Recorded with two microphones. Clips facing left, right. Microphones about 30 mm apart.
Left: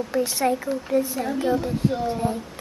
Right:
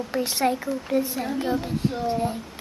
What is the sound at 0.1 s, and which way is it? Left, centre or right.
Speech, right.